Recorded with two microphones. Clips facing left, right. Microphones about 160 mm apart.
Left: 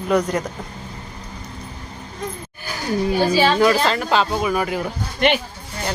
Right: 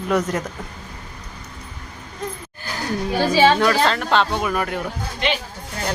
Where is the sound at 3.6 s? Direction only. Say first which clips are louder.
Left 2 dB; 5° left (ahead or behind).